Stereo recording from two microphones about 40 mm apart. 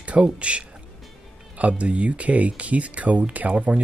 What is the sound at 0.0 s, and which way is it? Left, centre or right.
A man's voice, right.